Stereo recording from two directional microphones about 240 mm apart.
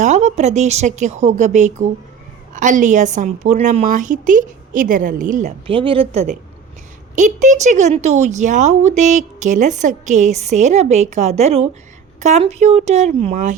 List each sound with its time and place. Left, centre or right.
0.0 s a woman's voice: right